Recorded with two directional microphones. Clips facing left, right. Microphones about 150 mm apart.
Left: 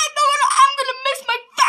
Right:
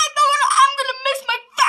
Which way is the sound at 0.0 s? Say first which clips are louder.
Even; centre (ahead or behind).